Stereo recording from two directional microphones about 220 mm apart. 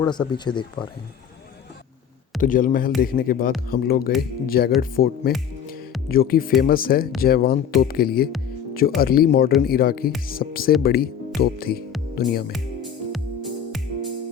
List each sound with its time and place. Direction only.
0.0 s speech: 20° left (ahead or behind)
2.4 s speech: 40° left (ahead or behind)
13.1 s music: centre (ahead or behind)